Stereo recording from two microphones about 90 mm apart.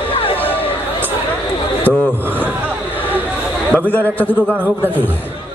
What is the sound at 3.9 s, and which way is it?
Speech, 20° left (ahead or behind).